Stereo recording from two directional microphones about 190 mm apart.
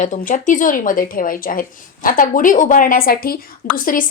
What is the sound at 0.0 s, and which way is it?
Speech, 40° left (ahead or behind).